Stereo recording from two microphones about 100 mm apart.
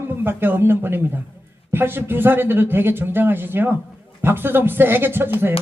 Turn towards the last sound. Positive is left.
turn(degrees=-20)  # may be behind; listen again after turning